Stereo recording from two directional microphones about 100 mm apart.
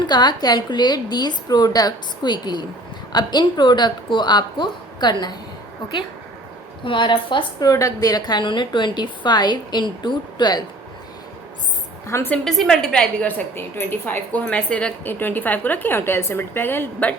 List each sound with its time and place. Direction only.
0.1 s a woman's voice: 45° left (ahead or behind)
6.8 s a woman's voice: 55° left (ahead or behind)
7.7 s a woman's voice: 35° left (ahead or behind)
12.0 s speech: 25° left (ahead or behind)
12.5 s a woman's voice: 5° left (ahead or behind)
13.6 s speech: 20° left (ahead or behind)